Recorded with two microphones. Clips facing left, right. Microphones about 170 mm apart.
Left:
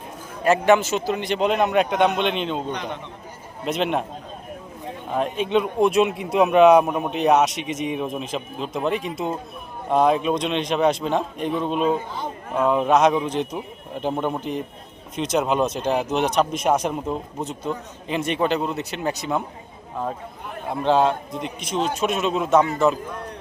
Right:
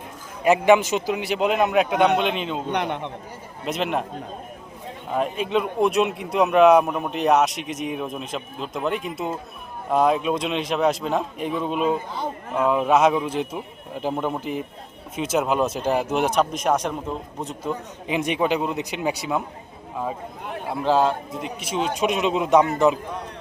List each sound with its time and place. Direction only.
0.4 s a man's voice: 15° right (ahead or behind)
2.7 s a man's voice: 60° right (ahead or behind)
3.7 s speech: centre (ahead or behind)
5.1 s speech: centre (ahead or behind)
17.7 s a man's voice: 15° right (ahead or behind)
20.7 s a man's voice: 5° right (ahead or behind)